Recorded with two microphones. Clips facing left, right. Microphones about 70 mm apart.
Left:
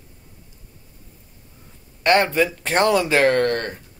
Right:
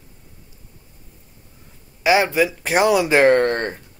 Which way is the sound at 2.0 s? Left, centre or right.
Centre.